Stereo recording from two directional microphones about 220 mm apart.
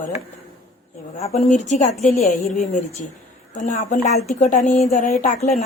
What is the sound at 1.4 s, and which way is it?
Speech, 30° left (ahead or behind).